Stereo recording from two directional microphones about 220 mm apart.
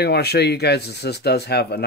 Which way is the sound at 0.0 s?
50° left (ahead or behind).